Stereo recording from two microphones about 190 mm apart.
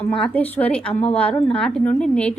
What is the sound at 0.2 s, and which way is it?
A woman's voice, 10° left (ahead or behind).